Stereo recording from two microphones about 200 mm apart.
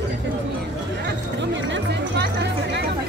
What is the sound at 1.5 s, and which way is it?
Music, 60° right (ahead or behind).